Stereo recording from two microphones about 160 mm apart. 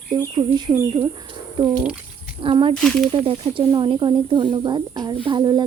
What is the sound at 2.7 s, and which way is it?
Speech, 5° left (ahead or behind).